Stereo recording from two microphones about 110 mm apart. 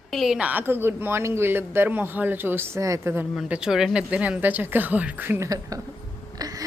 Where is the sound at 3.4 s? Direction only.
10° right (ahead or behind).